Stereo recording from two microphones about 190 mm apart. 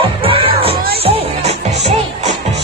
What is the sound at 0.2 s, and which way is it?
Music, 30° right (ahead or behind).